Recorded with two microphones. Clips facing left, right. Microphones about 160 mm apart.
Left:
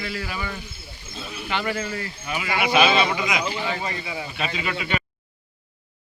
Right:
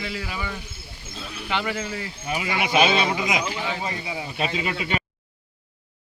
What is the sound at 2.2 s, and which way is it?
Speech, 35° right (ahead or behind).